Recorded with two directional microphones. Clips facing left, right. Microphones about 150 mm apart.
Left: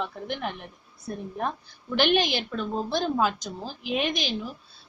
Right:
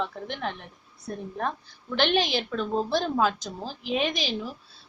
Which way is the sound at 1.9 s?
5° left (ahead or behind).